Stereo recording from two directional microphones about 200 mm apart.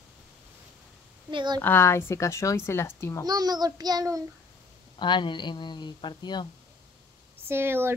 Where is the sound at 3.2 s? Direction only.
20° right (ahead or behind).